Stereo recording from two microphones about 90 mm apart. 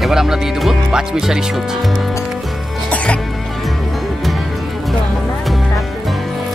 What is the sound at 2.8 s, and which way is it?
Music, 15° left (ahead or behind).